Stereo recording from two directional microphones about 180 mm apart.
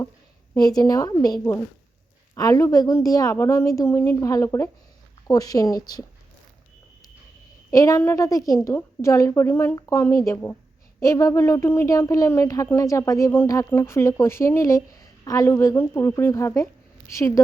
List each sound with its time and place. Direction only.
0.8 s a woman's voice: 20° left (ahead or behind)
7.7 s speech: 15° left (ahead or behind)